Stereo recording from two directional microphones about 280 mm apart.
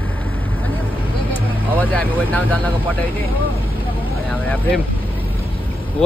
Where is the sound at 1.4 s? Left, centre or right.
Centre.